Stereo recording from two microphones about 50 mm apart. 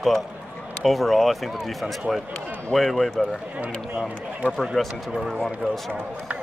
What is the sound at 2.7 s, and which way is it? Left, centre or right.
Speech, centre.